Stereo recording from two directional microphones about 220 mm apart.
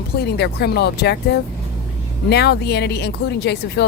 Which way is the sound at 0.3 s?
50° left (ahead or behind).